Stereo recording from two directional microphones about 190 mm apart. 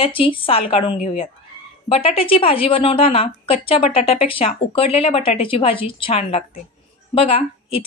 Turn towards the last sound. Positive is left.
turn(degrees=30)  # may be behind; listen again after turning